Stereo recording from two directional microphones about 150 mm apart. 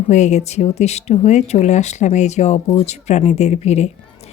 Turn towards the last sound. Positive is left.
turn(degrees=45)  # may be behind; listen again after turning